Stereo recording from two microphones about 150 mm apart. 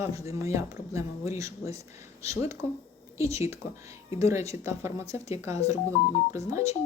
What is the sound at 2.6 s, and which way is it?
Speech, 45° left (ahead or behind).